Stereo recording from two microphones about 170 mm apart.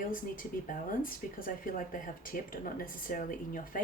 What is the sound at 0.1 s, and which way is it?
Speech, 55° left (ahead or behind).